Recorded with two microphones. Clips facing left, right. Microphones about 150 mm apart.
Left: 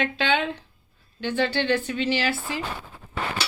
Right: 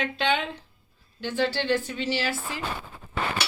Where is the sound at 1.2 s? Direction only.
65° left (ahead or behind).